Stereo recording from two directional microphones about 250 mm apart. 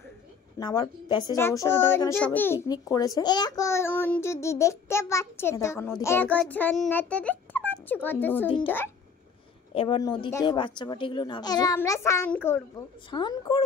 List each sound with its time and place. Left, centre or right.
0.6 s child singing: centre
9.8 s child singing: centre